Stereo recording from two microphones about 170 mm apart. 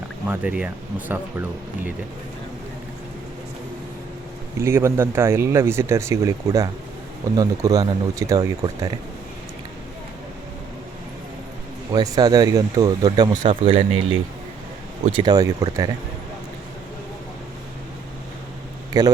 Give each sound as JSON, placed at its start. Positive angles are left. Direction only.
{"t": 0.3, "sound": "speech", "side_deg": -10}
{"t": 4.5, "sound": "speech", "side_deg": -15}
{"t": 11.9, "sound": "speech", "side_deg": -25}
{"t": 13.5, "sound": "speech", "side_deg": -35}
{"t": 19.0, "sound": "speech", "side_deg": -25}